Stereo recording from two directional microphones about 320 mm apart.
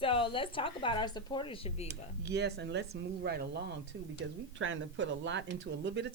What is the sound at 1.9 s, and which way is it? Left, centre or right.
A woman's voice, right.